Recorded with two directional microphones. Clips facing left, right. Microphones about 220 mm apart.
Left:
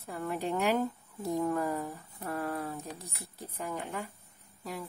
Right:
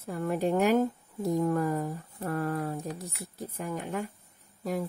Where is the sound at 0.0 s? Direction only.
45° right (ahead or behind).